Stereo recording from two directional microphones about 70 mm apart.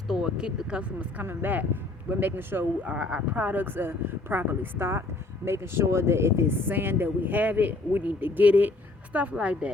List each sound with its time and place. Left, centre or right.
0.1 s speech: centre; by 2.6 s right
2.8 s speech: centre
3.3 s speech: right